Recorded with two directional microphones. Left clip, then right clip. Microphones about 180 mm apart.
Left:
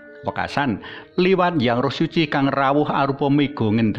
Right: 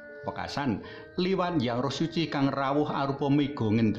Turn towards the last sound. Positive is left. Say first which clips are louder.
# left 7 dB
turn(degrees=20)  # may be behind; listen again after turning